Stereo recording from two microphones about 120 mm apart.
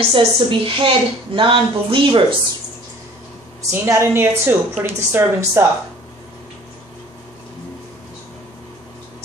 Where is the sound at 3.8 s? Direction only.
25° right (ahead or behind).